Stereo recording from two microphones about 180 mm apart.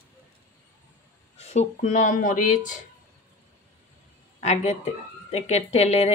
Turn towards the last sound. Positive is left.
turn(degrees=35)  # may be behind; listen again after turning